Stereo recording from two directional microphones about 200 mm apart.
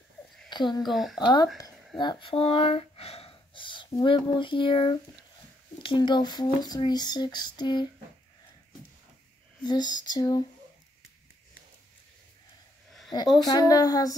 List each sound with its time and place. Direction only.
0.5 s a woman's voice: 20° left (ahead or behind)
0.8 s speech: centre (ahead or behind)
1.2 s speech: 20° left (ahead or behind)
9.6 s speech: 20° left (ahead or behind)
13.4 s speech: 20° left (ahead or behind)